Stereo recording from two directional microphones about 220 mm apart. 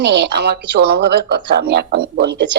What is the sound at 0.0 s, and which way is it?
Speech, 50° right (ahead or behind).